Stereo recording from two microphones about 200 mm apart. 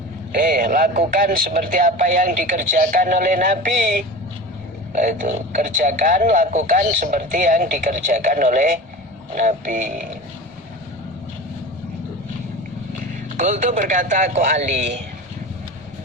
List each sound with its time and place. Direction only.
0.3 s a man's voice: 45° right (ahead or behind)
13.3 s a man's voice: 40° right (ahead or behind)